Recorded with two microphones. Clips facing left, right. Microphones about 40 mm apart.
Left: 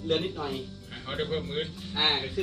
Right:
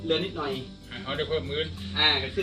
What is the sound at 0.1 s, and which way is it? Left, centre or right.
Speech, right.